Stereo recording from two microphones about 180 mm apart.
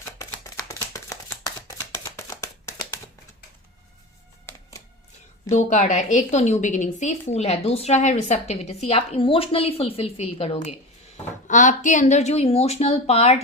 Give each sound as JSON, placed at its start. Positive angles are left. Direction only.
{"t": 0.2, "sound": "a sound", "side_deg": 20}
{"t": 5.5, "sound": "a woman's voice", "side_deg": 40}
{"t": 11.4, "sound": "a woman's voice", "side_deg": 45}